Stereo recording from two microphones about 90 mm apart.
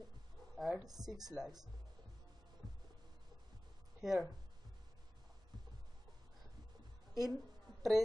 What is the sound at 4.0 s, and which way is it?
Speech, 5° right (ahead or behind).